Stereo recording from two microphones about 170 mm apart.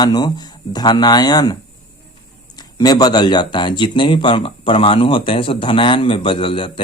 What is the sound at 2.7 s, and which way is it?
Speech, 25° left (ahead or behind).